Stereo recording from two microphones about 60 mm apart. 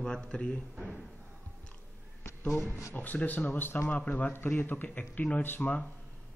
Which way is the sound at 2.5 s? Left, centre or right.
Left.